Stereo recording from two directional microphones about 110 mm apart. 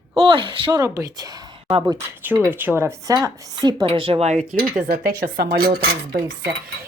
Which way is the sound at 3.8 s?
55° right (ahead or behind).